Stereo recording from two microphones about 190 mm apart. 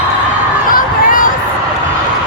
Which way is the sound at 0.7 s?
45° left (ahead or behind).